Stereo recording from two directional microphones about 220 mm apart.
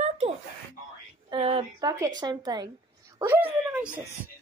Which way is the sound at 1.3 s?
25° right (ahead or behind).